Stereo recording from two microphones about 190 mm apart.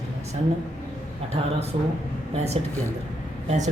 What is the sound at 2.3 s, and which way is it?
Speech, 35° right (ahead or behind).